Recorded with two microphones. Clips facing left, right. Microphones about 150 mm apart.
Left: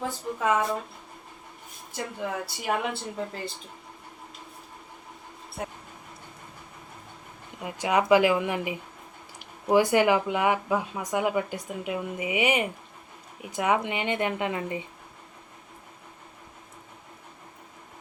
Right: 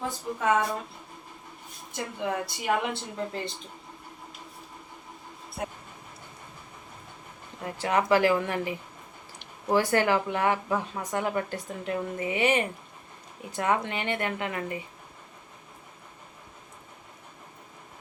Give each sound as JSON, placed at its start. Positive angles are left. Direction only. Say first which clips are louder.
{"t": 0.3, "sound": "speech", "louder": "right 1 dB", "side_deg": 0}
{"t": 1.9, "sound": "speech", "louder": "right 1 dB", "side_deg": 0}
{"t": 7.6, "sound": "speech", "louder": "left 1 dB", "side_deg": 15}